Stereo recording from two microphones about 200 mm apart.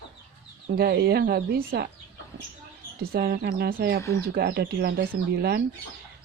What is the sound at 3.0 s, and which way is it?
Speech, 50° right (ahead or behind).